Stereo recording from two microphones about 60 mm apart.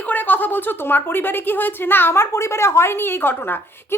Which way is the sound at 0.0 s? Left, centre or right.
Left.